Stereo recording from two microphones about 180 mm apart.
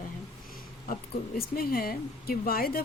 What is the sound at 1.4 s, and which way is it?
Speech, 55° left (ahead or behind).